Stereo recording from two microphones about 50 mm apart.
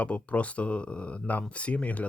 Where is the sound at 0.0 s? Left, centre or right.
Left.